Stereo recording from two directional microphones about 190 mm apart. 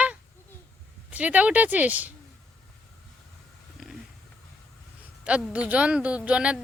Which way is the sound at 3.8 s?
Centre (ahead or behind).